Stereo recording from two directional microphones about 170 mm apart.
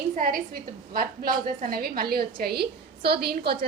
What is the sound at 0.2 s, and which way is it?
A woman's voice, 55° right (ahead or behind).